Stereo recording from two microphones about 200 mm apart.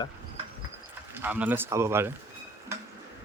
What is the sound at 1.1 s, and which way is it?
Speech, 10° right (ahead or behind).